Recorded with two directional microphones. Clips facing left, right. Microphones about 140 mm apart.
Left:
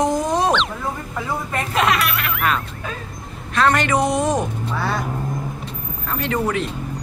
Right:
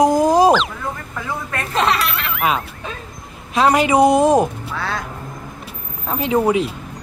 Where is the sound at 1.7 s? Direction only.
30° right (ahead or behind).